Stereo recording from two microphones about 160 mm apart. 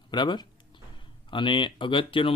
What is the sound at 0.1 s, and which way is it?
Speech, 30° left (ahead or behind).